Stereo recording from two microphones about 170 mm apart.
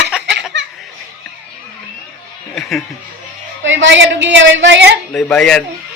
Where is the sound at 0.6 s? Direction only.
90° right.